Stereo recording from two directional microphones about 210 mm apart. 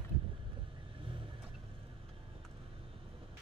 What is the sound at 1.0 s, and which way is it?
Vehicle, 25° right (ahead or behind).